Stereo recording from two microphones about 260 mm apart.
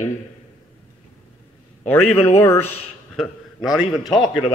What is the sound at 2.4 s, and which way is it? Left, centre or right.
A man's voice, centre.